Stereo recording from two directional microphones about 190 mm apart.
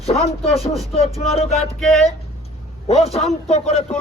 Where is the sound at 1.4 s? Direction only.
35° left (ahead or behind).